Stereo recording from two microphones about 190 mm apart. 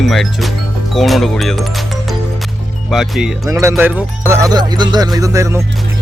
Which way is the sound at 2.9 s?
Centre (ahead or behind).